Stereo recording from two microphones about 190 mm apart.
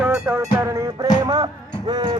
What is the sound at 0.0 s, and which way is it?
Music, 10° right (ahead or behind).